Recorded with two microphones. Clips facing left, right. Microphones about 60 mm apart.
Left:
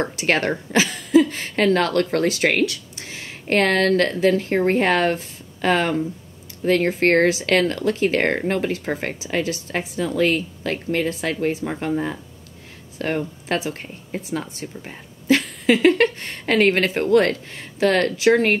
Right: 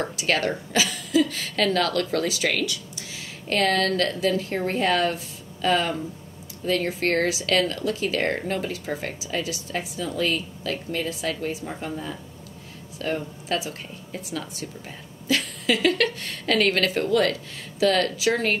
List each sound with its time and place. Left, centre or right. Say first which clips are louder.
0.0 s a woman's voice: left 4 dB; left